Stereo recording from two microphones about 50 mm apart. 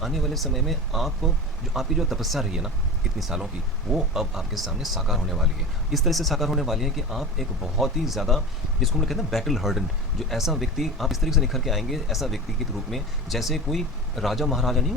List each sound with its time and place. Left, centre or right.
0.0 s speech: centre